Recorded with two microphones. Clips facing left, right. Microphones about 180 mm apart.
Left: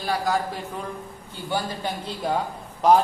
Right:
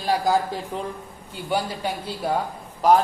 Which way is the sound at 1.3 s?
10° right (ahead or behind).